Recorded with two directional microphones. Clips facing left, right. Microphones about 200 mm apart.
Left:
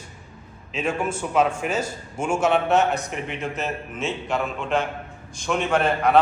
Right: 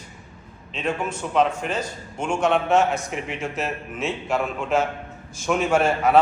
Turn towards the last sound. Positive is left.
turn(degrees=0)  # may be behind; listen again after turning